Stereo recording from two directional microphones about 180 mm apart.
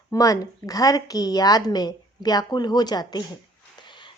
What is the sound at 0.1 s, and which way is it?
A woman's voice, 20° left (ahead or behind).